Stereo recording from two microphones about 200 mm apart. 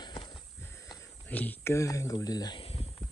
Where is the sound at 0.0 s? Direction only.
20° left (ahead or behind).